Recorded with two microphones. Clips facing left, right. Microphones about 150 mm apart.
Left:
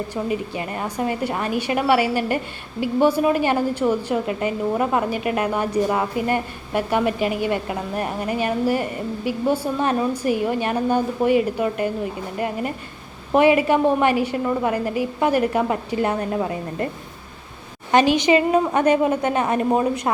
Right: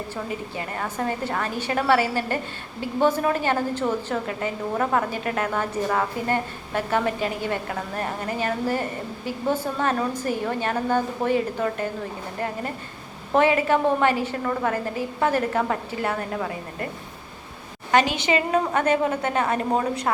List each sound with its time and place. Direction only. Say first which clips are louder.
0.1 s a woman's voice: left 6 dB; 20° left (ahead or behind)
13.3 s a woman's voice: left 4 dB; 15° left (ahead or behind)
17.9 s a woman's voice: left 5 dB; 20° left (ahead or behind)